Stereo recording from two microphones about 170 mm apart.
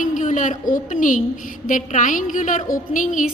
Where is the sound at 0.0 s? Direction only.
50° left (ahead or behind).